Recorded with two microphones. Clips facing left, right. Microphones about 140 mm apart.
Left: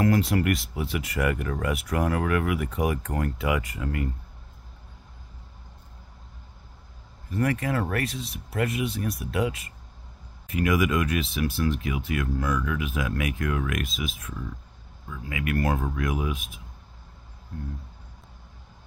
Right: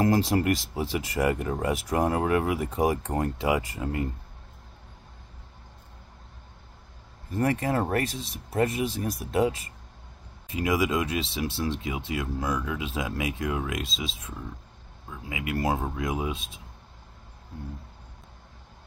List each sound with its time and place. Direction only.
0.0 s speech: 35° right (ahead or behind)
7.2 s speech: 35° right (ahead or behind)